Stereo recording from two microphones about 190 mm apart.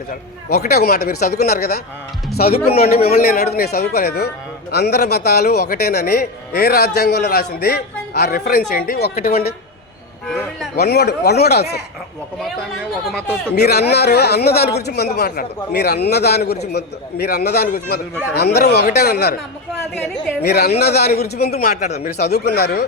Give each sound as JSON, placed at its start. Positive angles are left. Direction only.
{"t": 0.1, "sound": "a man's voice", "side_deg": 50}
{"t": 10.2, "sound": "speech", "side_deg": 0}
{"t": 10.8, "sound": "a man's voice", "side_deg": 60}
{"t": 13.1, "sound": "speech", "side_deg": 5}
{"t": 13.6, "sound": "a man's voice", "side_deg": 60}
{"t": 20.4, "sound": "a man's voice", "side_deg": 60}
{"t": 22.2, "sound": "a man's voice", "side_deg": 60}